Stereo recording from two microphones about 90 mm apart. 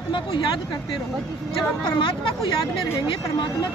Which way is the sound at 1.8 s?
75° left (ahead or behind).